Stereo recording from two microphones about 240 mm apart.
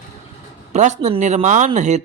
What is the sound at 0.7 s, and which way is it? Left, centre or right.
Speech, right.